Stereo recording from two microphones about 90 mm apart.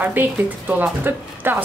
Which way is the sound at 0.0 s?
20° right (ahead or behind).